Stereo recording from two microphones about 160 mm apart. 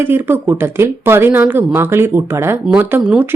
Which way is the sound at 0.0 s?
15° right (ahead or behind).